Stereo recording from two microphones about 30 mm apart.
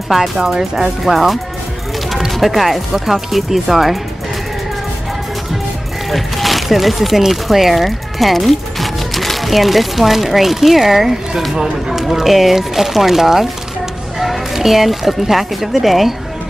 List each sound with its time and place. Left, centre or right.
0.1 s speech: centre
2.4 s speech: centre
6.0 s speech: centre
11.5 s speech: centre